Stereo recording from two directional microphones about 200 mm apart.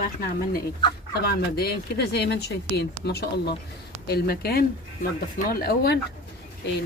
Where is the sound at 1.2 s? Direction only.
55° left (ahead or behind).